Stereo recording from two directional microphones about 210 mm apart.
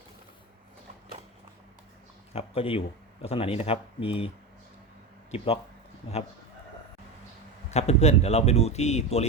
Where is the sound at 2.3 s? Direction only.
25° left (ahead or behind).